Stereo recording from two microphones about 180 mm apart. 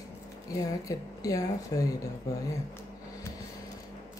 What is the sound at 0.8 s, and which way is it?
Speech, 20° left (ahead or behind).